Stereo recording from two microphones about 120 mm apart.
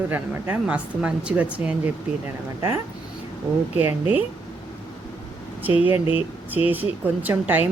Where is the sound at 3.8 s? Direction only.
15° right (ahead or behind).